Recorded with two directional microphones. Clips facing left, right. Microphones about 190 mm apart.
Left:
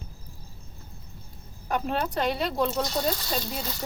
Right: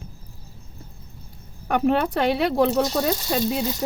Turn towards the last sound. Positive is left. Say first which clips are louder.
# right 8 dB
turn(degrees=-85)